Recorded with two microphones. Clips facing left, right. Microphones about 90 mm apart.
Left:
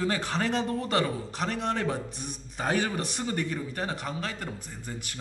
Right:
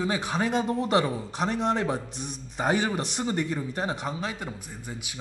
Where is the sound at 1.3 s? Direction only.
5° right (ahead or behind).